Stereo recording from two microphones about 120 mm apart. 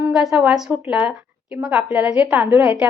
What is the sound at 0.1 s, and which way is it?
A woman's voice, 5° right (ahead or behind).